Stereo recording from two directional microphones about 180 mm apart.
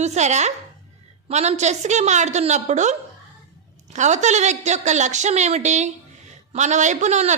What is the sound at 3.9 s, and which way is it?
A woman's voice, 40° right (ahead or behind).